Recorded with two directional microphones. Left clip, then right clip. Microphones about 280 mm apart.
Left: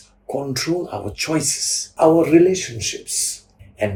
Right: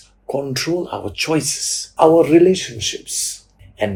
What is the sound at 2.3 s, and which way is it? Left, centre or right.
Speech, centre.